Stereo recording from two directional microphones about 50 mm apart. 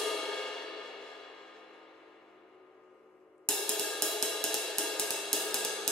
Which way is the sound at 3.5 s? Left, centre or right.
Centre.